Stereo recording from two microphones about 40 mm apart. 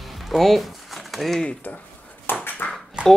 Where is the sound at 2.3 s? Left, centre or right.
Left.